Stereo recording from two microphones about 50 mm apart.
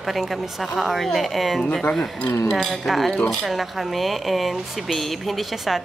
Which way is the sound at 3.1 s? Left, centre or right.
Centre.